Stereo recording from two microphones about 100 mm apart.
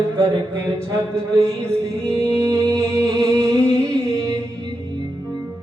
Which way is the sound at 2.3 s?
35° right (ahead or behind).